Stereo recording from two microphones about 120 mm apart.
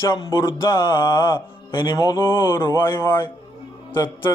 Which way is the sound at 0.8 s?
40° left (ahead or behind).